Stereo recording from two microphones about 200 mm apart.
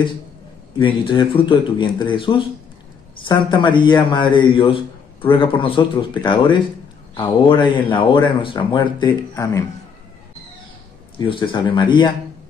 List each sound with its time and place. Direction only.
0.7 s speech: 25° left (ahead or behind)
11.1 s speech: 25° left (ahead or behind)